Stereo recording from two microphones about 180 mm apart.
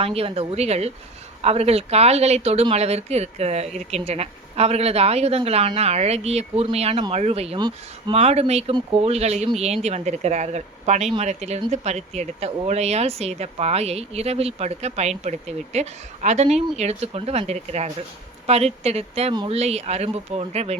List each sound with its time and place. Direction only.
0.0 s speech: 30° right (ahead or behind)
8.2 s speech: 35° right (ahead or behind)
19.3 s speech: 25° right (ahead or behind)
19.5 s speech: 35° right (ahead or behind)